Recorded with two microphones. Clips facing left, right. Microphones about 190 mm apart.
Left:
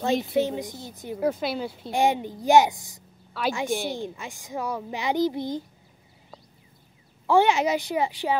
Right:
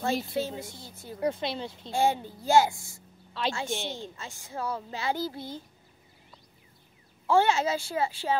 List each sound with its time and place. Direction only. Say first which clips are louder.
0.0 s a woman's voice: left 6 dB; 15° left (ahead or behind)
1.2 s speech: left 4 dB; 5° left (ahead or behind)
1.9 s a woman's voice: left 3 dB; 15° left (ahead or behind)
7.2 s a woman's voice: left 3 dB; 15° left (ahead or behind)